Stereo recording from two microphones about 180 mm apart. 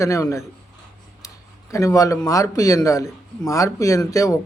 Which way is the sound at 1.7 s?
20° left (ahead or behind).